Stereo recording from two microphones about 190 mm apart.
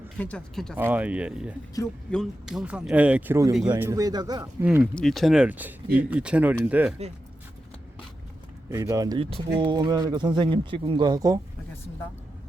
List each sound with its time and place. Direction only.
0.2 s speech: 5° left (ahead or behind)
0.8 s a man's voice: 10° right (ahead or behind)
4.6 s speech: 5° right (ahead or behind)
8.7 s a man's voice: 15° right (ahead or behind)